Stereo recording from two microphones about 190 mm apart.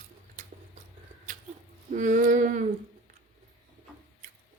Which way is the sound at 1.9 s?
40° right (ahead or behind).